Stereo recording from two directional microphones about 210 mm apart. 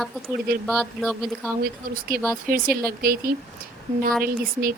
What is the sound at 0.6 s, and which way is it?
Speech, centre (ahead or behind).